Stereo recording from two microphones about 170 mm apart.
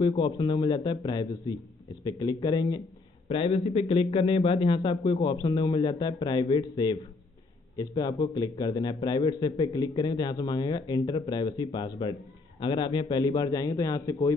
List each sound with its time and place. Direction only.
0.0 s a man's voice: 25° left (ahead or behind)